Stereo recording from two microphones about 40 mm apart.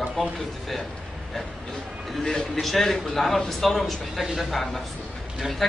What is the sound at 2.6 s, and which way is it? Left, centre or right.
Speech, centre.